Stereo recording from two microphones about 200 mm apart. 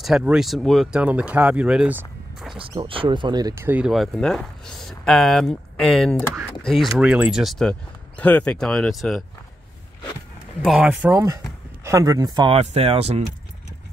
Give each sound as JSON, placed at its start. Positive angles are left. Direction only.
{"t": 0.0, "sound": "speech", "side_deg": -5}
{"t": 2.5, "sound": "speech", "side_deg": -25}
{"t": 10.6, "sound": "speech", "side_deg": 0}